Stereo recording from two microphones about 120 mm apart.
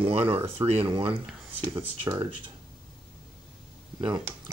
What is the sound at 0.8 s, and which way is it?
Speech, 40° right (ahead or behind).